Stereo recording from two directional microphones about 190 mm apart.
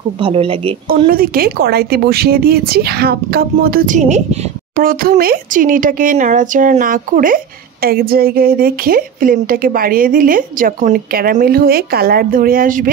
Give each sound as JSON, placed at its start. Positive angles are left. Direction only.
{"t": 0.2, "sound": "speech", "side_deg": -30}
{"t": 0.8, "sound": "speech", "side_deg": -50}
{"t": 4.7, "sound": "speech", "side_deg": -50}